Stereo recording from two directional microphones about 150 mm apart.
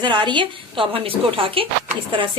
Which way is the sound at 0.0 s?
30° right (ahead or behind).